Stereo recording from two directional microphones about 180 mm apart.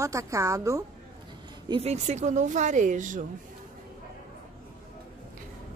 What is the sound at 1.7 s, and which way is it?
Speech, 35° right (ahead or behind).